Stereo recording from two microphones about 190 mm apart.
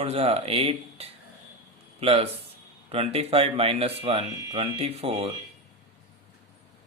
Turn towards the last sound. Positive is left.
turn(degrees=-30)  # may be behind; listen again after turning